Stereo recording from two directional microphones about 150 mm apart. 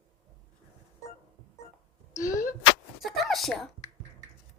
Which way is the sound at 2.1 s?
20° left (ahead or behind).